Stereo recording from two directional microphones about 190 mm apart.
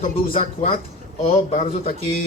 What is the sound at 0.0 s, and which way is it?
Speech, 30° left (ahead or behind).